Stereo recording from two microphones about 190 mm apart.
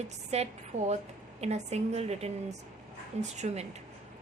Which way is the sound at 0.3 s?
35° right (ahead or behind).